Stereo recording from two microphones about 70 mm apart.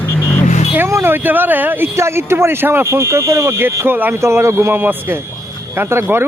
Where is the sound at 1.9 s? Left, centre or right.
Right.